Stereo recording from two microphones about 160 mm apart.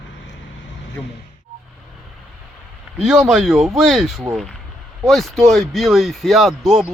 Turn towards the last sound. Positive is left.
turn(degrees=0)  # may be behind; listen again after turning